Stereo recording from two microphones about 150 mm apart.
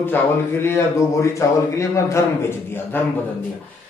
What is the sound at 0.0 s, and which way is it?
Speech, 15° left (ahead or behind).